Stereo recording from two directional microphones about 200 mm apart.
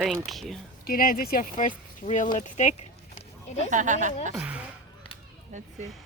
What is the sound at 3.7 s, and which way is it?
Speech, 40° right (ahead or behind).